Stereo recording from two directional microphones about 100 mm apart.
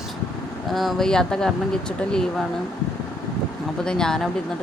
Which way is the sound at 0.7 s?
Centre (ahead or behind).